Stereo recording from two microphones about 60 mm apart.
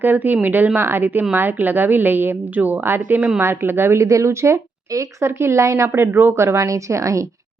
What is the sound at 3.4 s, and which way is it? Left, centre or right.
Speech, right.